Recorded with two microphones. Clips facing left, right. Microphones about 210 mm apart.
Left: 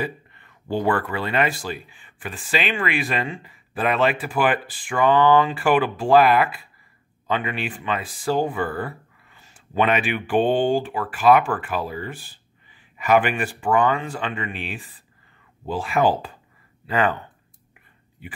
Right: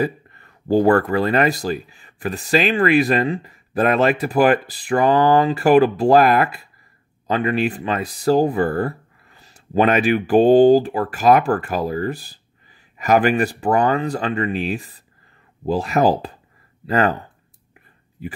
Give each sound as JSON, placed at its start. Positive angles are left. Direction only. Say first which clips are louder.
{"t": 0.0, "sound": "speech", "louder": "right 7 dB", "side_deg": -40}